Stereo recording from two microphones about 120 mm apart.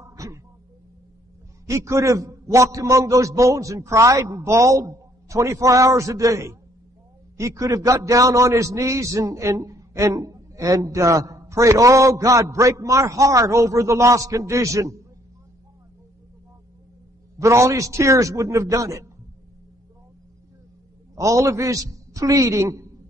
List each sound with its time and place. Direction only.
0.1 s a sound: 25° right (ahead or behind)
1.7 s a man's voice: 25° right (ahead or behind)
17.4 s a man's voice: 25° right (ahead or behind)
21.1 s a man's voice: 25° right (ahead or behind)